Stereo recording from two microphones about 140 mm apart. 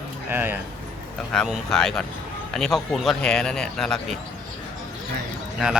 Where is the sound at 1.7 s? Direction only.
5° left (ahead or behind).